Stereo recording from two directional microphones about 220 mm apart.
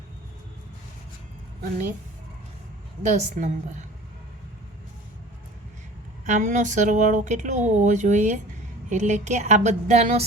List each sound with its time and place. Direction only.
3.0 s speech: 30° right (ahead or behind)
6.2 s speech: 35° right (ahead or behind)